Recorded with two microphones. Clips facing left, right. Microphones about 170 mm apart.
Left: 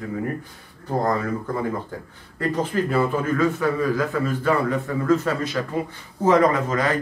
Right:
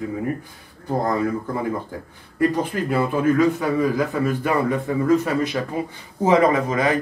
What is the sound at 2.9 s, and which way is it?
A man's voice, 15° right (ahead or behind).